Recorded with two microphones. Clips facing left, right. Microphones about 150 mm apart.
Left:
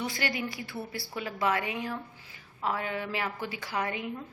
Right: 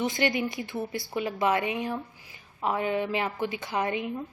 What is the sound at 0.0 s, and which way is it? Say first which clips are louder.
A woman's voice: right 6 dB; 20° right (ahead or behind).